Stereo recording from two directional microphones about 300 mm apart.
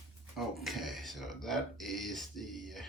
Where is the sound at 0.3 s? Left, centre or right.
Centre.